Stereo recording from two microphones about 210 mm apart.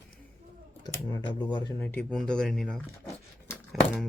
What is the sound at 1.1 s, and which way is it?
Speech, 20° left (ahead or behind).